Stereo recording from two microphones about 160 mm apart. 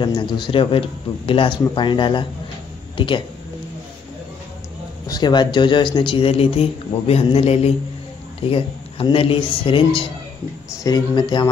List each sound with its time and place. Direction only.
0.0 s speech: 30° left (ahead or behind)
5.0 s speech: 25° left (ahead or behind)